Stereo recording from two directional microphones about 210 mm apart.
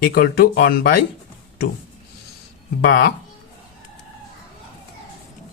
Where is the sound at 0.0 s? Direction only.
45° left (ahead or behind).